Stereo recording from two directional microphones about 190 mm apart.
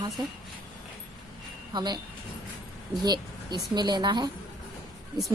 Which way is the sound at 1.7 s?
20° right (ahead or behind).